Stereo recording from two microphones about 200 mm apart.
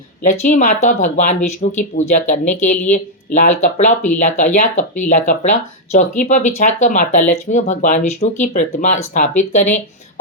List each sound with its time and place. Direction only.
0.2 s speech: 40° left (ahead or behind)